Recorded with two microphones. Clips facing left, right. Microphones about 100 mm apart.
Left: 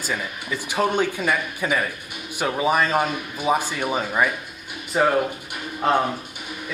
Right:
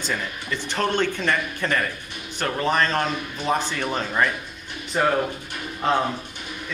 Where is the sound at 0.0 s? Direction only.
5° left (ahead or behind).